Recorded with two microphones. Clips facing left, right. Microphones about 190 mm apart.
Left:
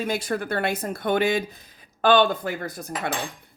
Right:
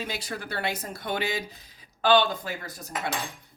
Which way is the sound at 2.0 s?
55° left (ahead or behind).